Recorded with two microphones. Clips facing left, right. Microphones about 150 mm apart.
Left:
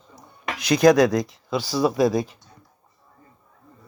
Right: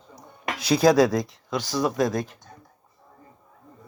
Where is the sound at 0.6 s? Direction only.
5° right (ahead or behind).